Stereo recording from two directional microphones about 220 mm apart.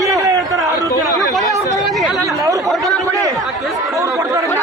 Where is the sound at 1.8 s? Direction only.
Centre (ahead or behind).